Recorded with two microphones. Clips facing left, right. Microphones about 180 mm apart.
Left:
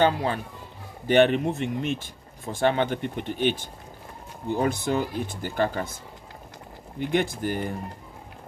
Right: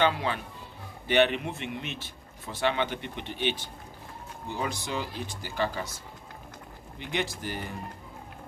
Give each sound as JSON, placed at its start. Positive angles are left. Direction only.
{"t": 0.0, "sound": "speech", "side_deg": 40}
{"t": 7.0, "sound": "speech", "side_deg": 50}